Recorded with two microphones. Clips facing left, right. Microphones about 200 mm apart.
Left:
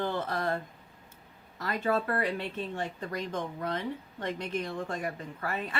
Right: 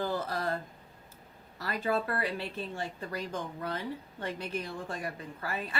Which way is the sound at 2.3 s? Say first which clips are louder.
Left 2 dB; 35° right (ahead or behind).